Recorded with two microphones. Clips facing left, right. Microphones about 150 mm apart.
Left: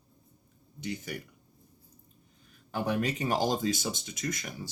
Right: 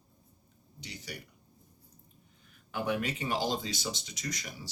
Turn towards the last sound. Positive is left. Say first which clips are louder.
# left 4 dB
turn(degrees=50)  # may be behind; listen again after turning